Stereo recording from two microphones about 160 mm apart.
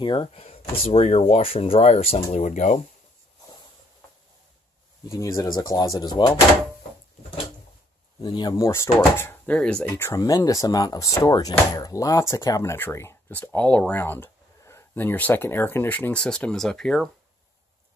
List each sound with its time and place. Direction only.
0.0 s speech: 30° left (ahead or behind)
5.0 s speech: 20° left (ahead or behind)
8.2 s speech: 25° left (ahead or behind); by 17.1 s 5° left (ahead or behind)